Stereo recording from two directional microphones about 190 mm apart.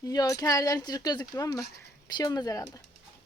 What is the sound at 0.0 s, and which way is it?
Speech, 20° left (ahead or behind).